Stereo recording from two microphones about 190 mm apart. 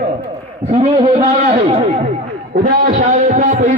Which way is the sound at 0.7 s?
30° right (ahead or behind).